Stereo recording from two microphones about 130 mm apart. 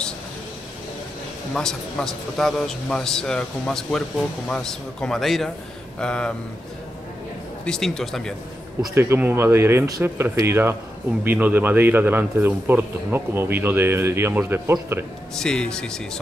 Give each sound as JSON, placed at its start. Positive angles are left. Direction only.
{"t": 1.5, "sound": "a man's voice", "side_deg": 5}
{"t": 5.9, "sound": "a sound", "side_deg": 5}
{"t": 7.6, "sound": "a man's voice", "side_deg": 5}
{"t": 8.9, "sound": "a man's voice", "side_deg": -20}
{"t": 15.3, "sound": "a man's voice", "side_deg": 5}